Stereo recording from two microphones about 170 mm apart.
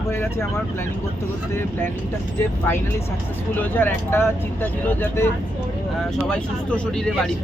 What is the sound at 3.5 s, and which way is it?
Speech, 10° left (ahead or behind).